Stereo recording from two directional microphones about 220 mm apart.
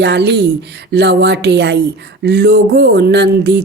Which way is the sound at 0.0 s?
50° right (ahead or behind).